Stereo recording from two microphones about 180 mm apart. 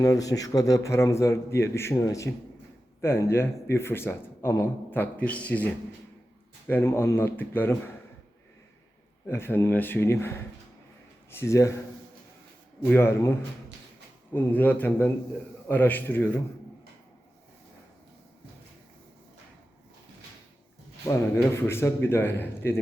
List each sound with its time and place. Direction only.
0.0 s speech: 20° left (ahead or behind)
6.7 s speech: 15° left (ahead or behind)
9.2 s speech: 10° left (ahead or behind)
12.9 s speech: 15° left (ahead or behind)
14.3 s speech: 10° left (ahead or behind)
21.0 s speech: 15° left (ahead or behind)